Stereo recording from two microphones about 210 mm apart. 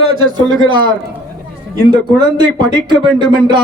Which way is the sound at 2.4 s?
20° right (ahead or behind).